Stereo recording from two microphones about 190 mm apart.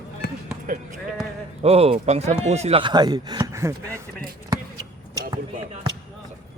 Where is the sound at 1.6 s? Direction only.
30° right (ahead or behind); by 4.0 s 15° right (ahead or behind).